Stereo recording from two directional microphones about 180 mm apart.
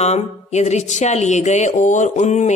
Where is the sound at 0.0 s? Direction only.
40° left (ahead or behind).